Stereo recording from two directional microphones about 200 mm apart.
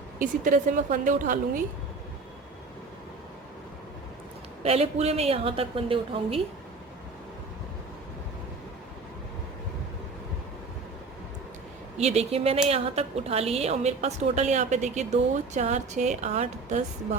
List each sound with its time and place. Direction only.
0.2 s a woman's voice: 40° right (ahead or behind)
4.6 s a woman's voice: 30° right (ahead or behind)
11.9 s a woman's voice: 30° right (ahead or behind)